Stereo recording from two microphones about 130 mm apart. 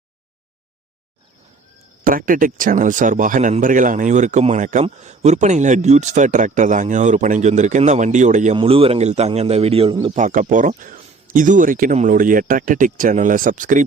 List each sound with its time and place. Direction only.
2.0 s speech: 90° right; by 8.5 s 70° right (ahead or behind)
8.5 s a man's voice: 45° right (ahead or behind)
10.2 s speech: 75° right (ahead or behind)
10.8 s speech: 90° right